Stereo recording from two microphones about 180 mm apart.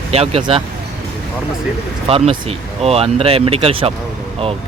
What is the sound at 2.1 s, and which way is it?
Speech, 30° right (ahead or behind).